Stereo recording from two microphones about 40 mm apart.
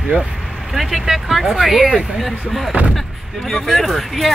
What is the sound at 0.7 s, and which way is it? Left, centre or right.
Vehicle, centre.